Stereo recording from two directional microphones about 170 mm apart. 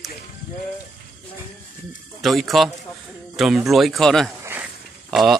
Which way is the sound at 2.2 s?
Centre (ahead or behind).